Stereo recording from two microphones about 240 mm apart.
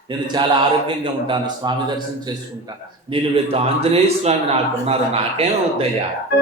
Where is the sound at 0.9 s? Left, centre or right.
Centre.